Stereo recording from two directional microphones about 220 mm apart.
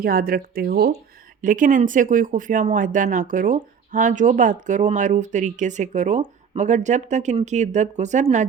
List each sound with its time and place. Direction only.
0.0 s speech: 40° right (ahead or behind)